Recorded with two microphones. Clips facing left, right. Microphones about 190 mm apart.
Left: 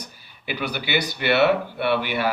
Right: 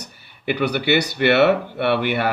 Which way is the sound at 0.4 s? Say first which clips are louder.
Right 8 dB; 60° right (ahead or behind).